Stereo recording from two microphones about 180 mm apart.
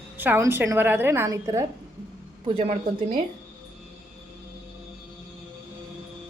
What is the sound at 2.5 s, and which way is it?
Speech, 40° right (ahead or behind).